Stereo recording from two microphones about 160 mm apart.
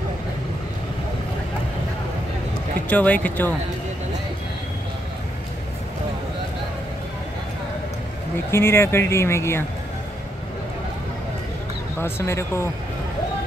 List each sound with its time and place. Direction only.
2.9 s speech: 10° left (ahead or behind)
8.5 s speech: 15° left (ahead or behind)
12.0 s speech: 15° left (ahead or behind)